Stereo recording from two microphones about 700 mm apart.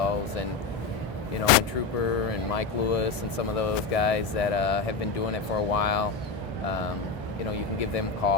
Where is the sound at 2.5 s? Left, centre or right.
Left.